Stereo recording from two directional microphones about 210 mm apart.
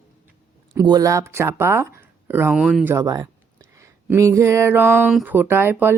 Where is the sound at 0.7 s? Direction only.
15° right (ahead or behind).